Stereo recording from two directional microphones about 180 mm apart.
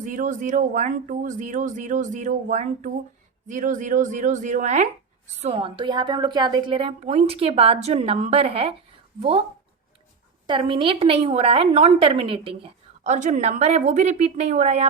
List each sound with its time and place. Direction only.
0.0 s speech: 45° right (ahead or behind)
5.4 s a woman's voice: 30° right (ahead or behind)
10.4 s a woman's voice: 30° right (ahead or behind)
13.1 s a woman's voice: 45° right (ahead or behind)